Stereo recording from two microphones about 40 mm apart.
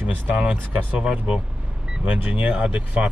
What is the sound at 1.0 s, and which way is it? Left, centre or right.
Speech, right.